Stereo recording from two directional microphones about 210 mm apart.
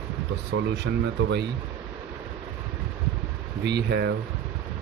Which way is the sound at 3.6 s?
50° right (ahead or behind).